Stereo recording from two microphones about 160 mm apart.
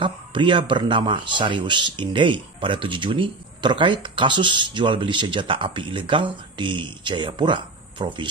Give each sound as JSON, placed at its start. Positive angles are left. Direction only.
{"t": 0.0, "sound": "speech", "side_deg": -30}